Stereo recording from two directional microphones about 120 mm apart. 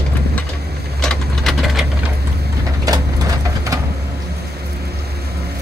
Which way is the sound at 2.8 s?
30° right (ahead or behind).